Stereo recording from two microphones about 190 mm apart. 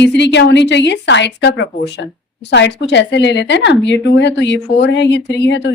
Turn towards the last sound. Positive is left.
turn(degrees=70)  # may be behind; listen again after turning